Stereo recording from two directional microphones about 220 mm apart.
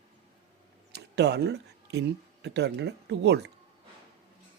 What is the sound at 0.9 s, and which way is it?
Speech, 50° right (ahead or behind).